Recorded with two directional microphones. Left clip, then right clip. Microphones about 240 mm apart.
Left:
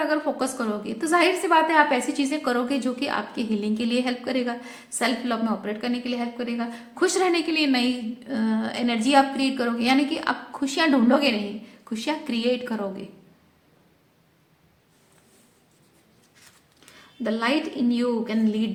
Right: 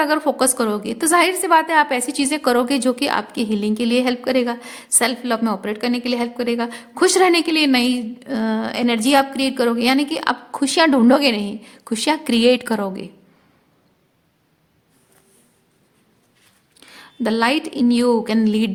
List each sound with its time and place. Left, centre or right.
0.0 s a woman's voice: right
16.9 s a woman's voice: right